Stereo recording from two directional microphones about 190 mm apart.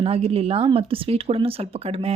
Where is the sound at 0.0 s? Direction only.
30° right (ahead or behind).